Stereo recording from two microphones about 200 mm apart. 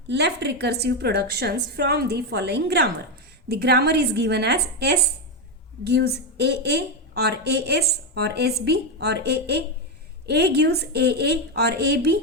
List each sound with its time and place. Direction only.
0.1 s a woman's voice: 55° right (ahead or behind)